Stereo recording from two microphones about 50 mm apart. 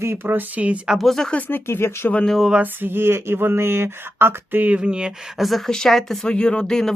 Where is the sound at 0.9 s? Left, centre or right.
Centre.